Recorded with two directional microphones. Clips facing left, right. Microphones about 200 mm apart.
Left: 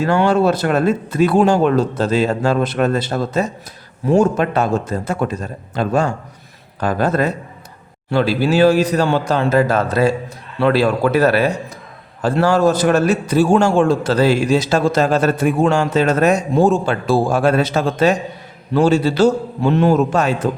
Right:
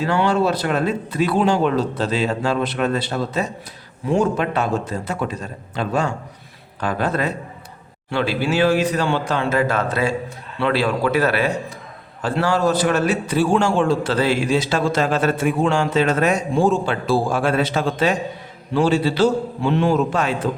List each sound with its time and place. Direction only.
0.0 s a man's voice: 45° left (ahead or behind)